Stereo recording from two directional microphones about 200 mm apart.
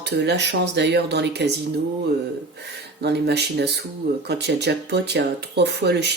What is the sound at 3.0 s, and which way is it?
Speech, 55° right (ahead or behind).